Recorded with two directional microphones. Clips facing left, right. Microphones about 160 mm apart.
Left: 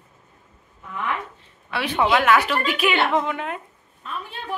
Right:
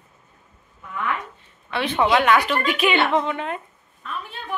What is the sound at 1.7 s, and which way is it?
A man's voice, 5° left (ahead or behind).